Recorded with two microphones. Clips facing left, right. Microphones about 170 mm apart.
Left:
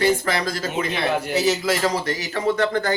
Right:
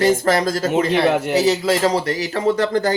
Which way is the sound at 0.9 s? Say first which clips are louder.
Right 6 dB; 70° right (ahead or behind).